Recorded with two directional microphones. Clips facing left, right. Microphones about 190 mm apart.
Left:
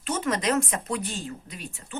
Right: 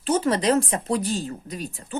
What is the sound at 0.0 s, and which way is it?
Speech, 30° right (ahead or behind).